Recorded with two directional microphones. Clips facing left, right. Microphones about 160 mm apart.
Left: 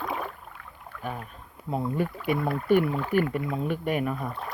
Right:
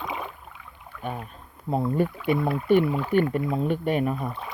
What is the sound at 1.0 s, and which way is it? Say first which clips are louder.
Speech: right 2 dB; 20° right (ahead or behind).